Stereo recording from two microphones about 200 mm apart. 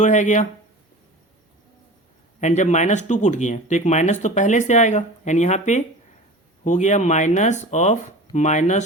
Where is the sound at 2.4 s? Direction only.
35° left (ahead or behind).